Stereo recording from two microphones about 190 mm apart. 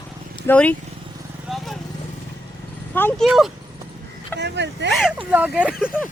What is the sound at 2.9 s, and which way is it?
Speech, 10° left (ahead or behind).